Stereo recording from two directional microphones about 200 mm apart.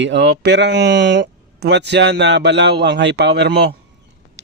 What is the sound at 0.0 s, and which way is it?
Speech, 60° right (ahead or behind).